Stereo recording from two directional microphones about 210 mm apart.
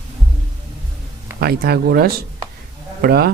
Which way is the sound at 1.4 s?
50° right (ahead or behind).